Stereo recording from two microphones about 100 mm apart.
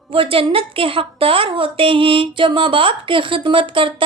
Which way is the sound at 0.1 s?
65° right (ahead or behind).